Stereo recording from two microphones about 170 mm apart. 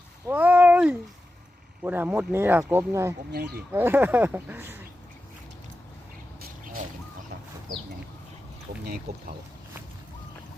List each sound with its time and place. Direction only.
0.3 s a sound: 10° right (ahead or behind)
1.8 s speech: 10° right (ahead or behind)
3.3 s speech: 65° right (ahead or behind)
3.7 s speech: 10° right (ahead or behind)
9.1 s speech: 65° right (ahead or behind)